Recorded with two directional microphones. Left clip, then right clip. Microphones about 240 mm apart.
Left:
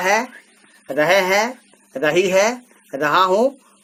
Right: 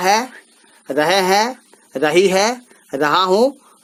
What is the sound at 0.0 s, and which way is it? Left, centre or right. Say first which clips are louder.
Speech: right 2 dB; right.